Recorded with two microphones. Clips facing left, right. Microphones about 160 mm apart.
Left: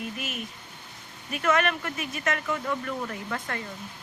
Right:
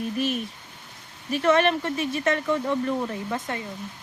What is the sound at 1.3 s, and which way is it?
Speech, 30° right (ahead or behind).